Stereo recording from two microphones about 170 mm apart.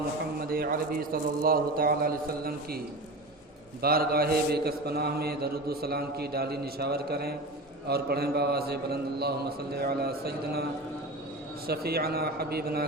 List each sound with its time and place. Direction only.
0.4 s a man's voice: 60° right (ahead or behind)